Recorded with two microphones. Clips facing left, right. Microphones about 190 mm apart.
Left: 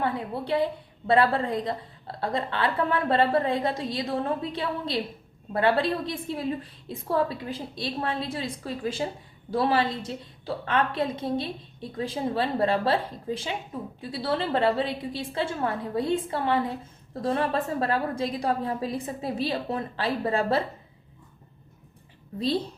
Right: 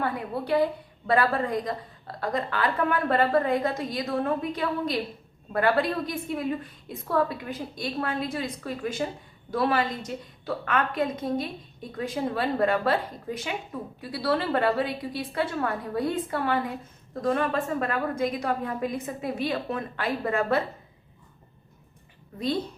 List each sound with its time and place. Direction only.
0.0 s a woman's voice: 25° left (ahead or behind)